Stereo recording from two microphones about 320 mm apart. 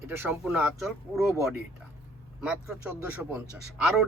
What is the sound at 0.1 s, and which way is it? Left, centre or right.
Speech, centre.